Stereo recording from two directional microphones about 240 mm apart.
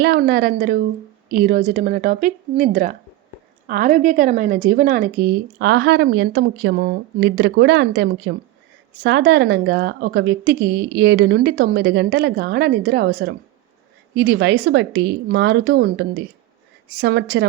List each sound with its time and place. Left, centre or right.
0.0 s a woman's voice: right